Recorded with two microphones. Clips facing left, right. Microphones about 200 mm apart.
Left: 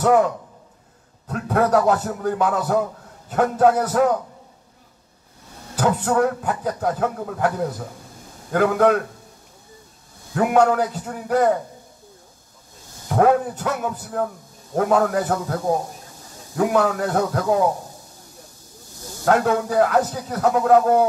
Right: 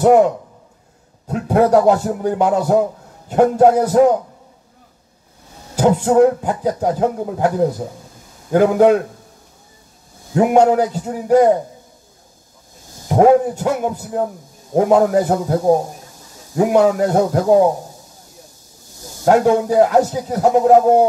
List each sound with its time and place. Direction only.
0.0 s a sound: 25° right (ahead or behind)
1.2 s a man's voice: 25° right (ahead or behind)
5.9 s a man's voice: 25° right (ahead or behind)
10.3 s a man's voice: 25° right (ahead or behind)
13.1 s a man's voice: 25° right (ahead or behind)
19.2 s a man's voice: 25° right (ahead or behind)